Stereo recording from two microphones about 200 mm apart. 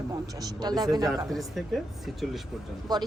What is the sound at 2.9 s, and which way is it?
Speech, 20° right (ahead or behind).